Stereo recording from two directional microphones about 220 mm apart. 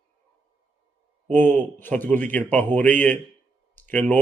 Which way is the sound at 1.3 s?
10° left (ahead or behind).